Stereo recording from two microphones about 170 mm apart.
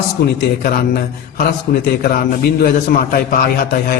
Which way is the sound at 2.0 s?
65° left (ahead or behind).